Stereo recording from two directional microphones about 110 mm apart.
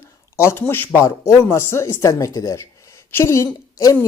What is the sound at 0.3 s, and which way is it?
A woman's voice, 20° left (ahead or behind).